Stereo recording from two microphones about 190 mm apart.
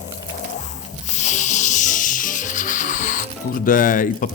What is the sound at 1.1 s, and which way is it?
Music, 40° left (ahead or behind).